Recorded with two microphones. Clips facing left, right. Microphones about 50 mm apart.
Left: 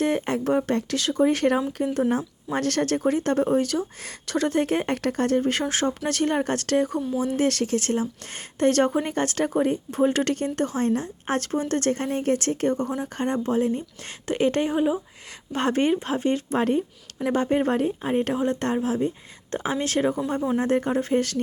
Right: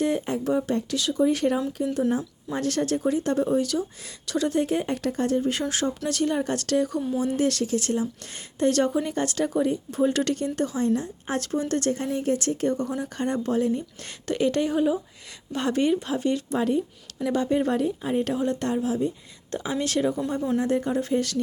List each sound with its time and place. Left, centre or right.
0.0 s speech: left
5.6 s a woman's voice: left
15.5 s speech: left